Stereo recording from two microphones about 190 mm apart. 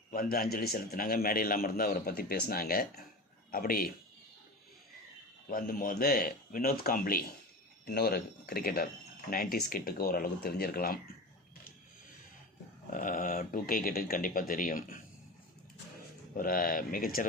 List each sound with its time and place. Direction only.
0.1 s a man's voice: 50° left (ahead or behind)
5.5 s a man's voice: 50° left (ahead or behind)
12.9 s a man's voice: 45° left (ahead or behind)
16.4 s a man's voice: 50° left (ahead or behind)